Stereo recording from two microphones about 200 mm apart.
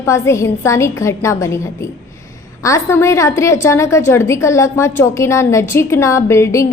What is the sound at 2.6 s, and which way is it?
A woman's voice, 15° left (ahead or behind).